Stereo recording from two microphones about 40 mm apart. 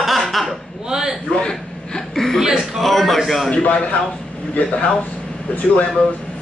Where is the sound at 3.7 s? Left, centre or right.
Left.